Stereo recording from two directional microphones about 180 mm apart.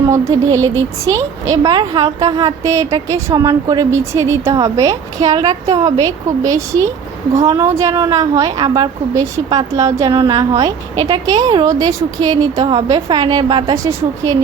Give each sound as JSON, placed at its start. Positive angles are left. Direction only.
{"t": 0.1, "sound": "a woman's voice", "side_deg": -15}